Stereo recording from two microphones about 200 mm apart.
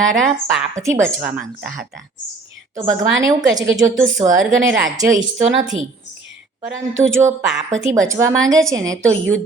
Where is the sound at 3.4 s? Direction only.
20° right (ahead or behind).